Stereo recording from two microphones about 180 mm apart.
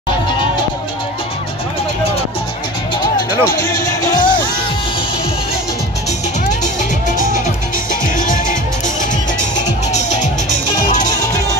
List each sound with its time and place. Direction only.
3.2 s music: 20° left (ahead or behind)
7.9 s music: 45° left (ahead or behind)